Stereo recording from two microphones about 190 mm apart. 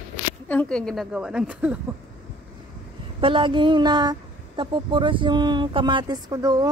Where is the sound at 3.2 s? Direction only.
25° right (ahead or behind).